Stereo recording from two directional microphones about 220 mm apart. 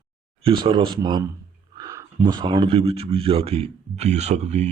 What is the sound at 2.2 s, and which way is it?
Speech, 20° right (ahead or behind).